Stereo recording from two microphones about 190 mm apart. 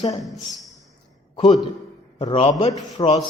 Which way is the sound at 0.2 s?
Centre (ahead or behind).